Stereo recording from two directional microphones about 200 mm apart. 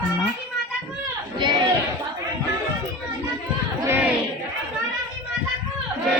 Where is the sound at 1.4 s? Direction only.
25° right (ahead or behind).